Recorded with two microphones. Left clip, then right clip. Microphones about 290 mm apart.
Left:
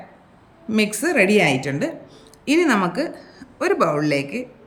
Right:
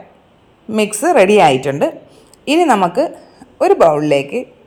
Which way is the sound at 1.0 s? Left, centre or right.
Right.